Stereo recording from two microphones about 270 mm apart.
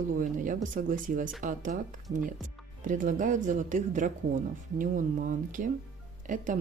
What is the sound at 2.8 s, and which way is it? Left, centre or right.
Speech, right.